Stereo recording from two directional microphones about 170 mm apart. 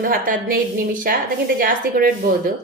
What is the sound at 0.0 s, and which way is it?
A woman's voice, 55° right (ahead or behind).